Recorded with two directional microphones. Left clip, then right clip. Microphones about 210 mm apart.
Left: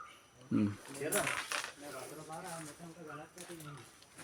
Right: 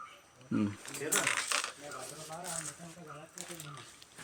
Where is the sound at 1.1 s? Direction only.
50° right (ahead or behind).